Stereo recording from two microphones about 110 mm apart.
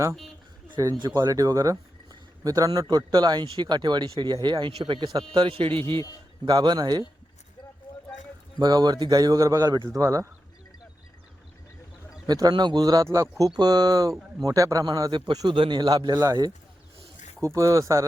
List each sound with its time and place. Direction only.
0.9 s a man's voice: 40° right (ahead or behind)
3.4 s speech: 55° right (ahead or behind)
3.7 s a man's voice: 40° right (ahead or behind)
6.4 s a man's voice: 40° right (ahead or behind)
8.5 s a man's voice: 40° right (ahead or behind)
12.3 s a man's voice: 40° right (ahead or behind)